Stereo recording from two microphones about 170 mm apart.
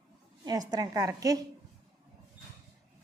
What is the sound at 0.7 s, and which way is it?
Speech, 20° right (ahead or behind).